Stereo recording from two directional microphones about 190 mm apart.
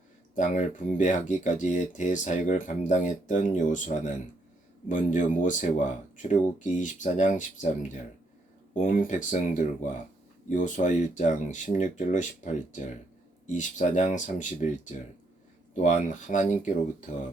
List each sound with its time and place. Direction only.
0.3 s speech: 40° left (ahead or behind)